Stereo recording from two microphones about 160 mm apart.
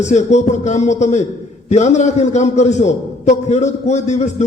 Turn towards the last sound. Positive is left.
turn(degrees=45)  # may be behind; listen again after turning